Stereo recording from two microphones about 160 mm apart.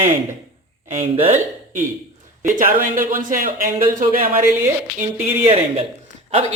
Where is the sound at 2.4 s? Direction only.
60° right (ahead or behind).